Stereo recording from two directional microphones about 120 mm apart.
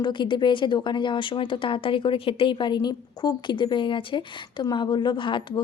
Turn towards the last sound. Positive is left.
turn(degrees=45)  # may be behind; listen again after turning